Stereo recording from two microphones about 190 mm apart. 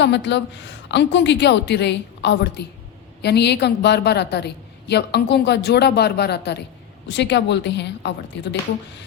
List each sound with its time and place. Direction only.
0.0 s a woman's voice: 65° left (ahead or behind)